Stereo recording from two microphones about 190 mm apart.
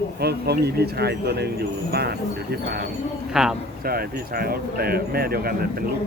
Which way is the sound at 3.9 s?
50° right (ahead or behind).